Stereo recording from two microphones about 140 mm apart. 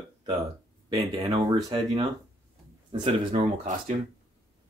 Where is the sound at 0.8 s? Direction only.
30° right (ahead or behind).